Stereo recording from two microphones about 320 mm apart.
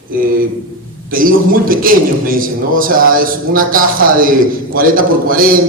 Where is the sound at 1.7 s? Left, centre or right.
Right.